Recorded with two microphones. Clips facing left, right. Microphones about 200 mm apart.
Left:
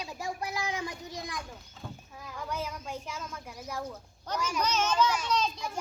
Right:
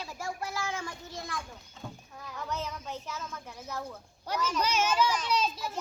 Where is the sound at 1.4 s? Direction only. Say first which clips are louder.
Even; centre (ahead or behind).